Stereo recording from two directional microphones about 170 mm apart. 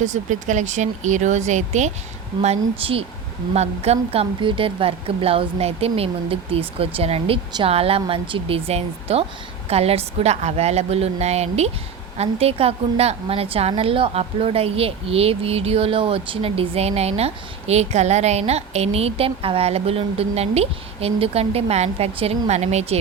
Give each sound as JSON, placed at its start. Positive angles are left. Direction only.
{"t": 0.0, "sound": "a woman's voice", "side_deg": -45}